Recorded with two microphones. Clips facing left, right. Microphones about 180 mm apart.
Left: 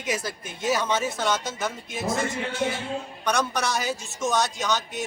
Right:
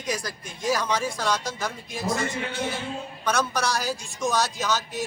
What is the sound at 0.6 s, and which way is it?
Speech, 25° left (ahead or behind).